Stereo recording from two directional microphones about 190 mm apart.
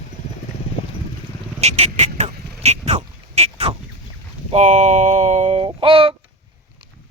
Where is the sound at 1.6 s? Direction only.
35° right (ahead or behind).